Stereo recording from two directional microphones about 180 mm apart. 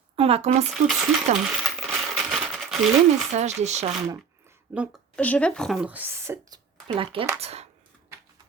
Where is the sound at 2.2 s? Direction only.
Centre (ahead or behind).